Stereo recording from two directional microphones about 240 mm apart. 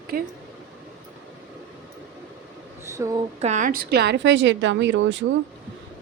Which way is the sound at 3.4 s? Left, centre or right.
Right.